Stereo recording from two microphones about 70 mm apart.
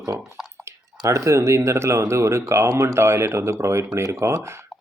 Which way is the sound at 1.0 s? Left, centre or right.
Right.